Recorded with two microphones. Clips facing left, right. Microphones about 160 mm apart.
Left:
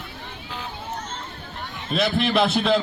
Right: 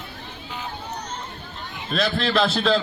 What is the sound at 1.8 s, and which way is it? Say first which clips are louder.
Speech: left 1 dB; 20° left (ahead or behind).